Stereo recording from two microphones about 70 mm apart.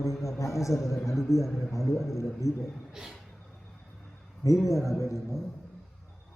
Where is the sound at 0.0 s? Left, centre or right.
Left.